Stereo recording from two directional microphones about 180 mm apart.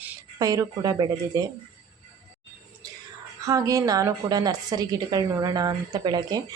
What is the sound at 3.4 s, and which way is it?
Speech, 20° right (ahead or behind).